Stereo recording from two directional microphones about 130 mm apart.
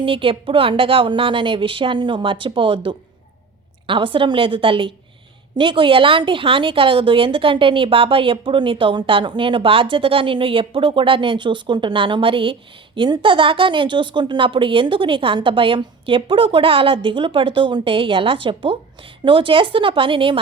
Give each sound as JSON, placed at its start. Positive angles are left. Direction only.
{"t": 0.0, "sound": "a woman's voice", "side_deg": -40}